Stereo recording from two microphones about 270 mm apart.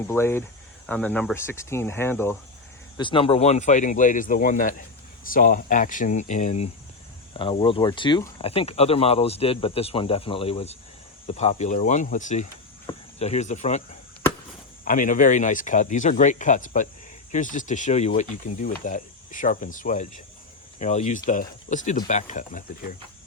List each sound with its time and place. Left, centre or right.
0.1 s speech: centre; by 13.8 s left
14.8 s speech: left